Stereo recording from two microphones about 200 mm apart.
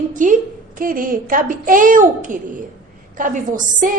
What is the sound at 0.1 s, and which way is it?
A woman's voice, 40° right (ahead or behind).